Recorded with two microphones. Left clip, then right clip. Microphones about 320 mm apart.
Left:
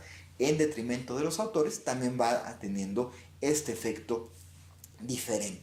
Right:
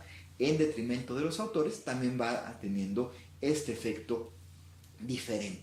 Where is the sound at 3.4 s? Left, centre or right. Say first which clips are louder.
Left 2 dB; left.